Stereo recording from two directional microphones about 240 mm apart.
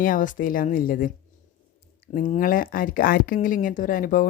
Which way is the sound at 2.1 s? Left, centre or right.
Left.